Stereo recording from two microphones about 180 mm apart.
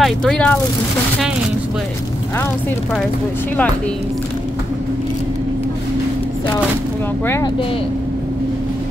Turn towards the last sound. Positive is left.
turn(degrees=10)  # may be behind; listen again after turning